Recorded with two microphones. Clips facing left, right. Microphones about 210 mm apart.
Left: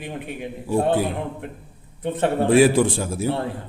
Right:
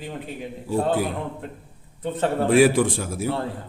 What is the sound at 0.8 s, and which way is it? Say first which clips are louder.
A man's voice: left 2 dB; 25° left (ahead or behind).